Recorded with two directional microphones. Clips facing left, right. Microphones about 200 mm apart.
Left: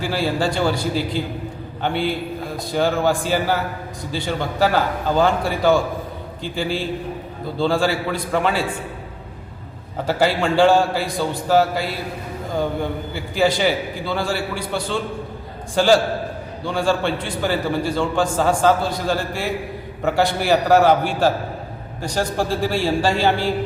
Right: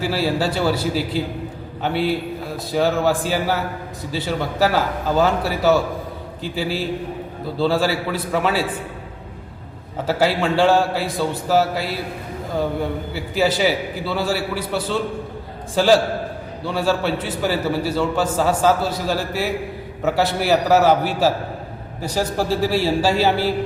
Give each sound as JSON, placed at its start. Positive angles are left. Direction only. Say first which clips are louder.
{"t": 0.0, "sound": "a man's voice", "louder": "right 1 dB", "side_deg": -5}
{"t": 10.1, "sound": "a man's voice", "louder": "even", "side_deg": 0}